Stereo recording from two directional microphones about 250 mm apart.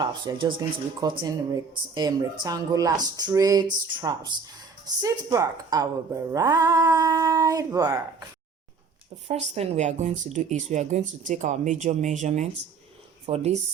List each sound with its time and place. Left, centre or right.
0.0 s a woman's voice: centre
9.2 s speech: right